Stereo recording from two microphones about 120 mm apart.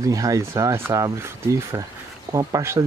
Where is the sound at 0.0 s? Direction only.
30° right (ahead or behind).